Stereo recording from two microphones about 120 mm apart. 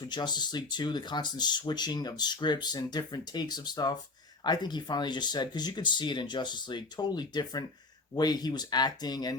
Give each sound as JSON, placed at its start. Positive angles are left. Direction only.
{"t": 0.0, "sound": "speech", "side_deg": 35}